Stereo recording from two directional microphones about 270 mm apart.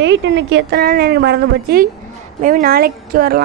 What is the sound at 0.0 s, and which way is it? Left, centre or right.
A woman's voice, right.